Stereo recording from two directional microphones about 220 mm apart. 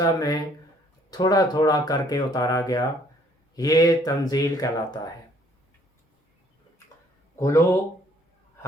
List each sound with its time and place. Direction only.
0.0 s speech: 15° left (ahead or behind)
7.3 s speech: 15° left (ahead or behind)